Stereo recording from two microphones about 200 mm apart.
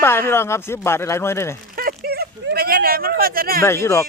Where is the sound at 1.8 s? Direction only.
50° right (ahead or behind).